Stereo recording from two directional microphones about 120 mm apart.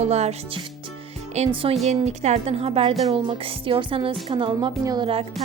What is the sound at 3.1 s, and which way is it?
Music, 50° right (ahead or behind).